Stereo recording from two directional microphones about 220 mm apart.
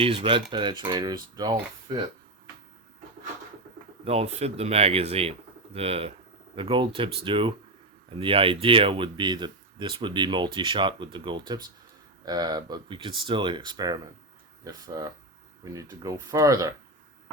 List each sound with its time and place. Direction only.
0.0 s speech: 25° right (ahead or behind)
4.0 s speech: 25° right (ahead or behind)